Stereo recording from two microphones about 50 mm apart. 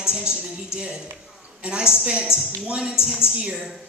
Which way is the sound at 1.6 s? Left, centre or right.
Centre.